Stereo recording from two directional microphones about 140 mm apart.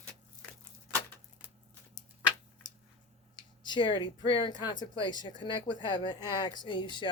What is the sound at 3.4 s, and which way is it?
Speech, 30° left (ahead or behind).